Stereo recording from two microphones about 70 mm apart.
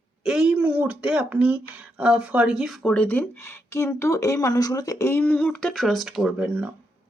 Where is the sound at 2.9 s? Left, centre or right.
Left.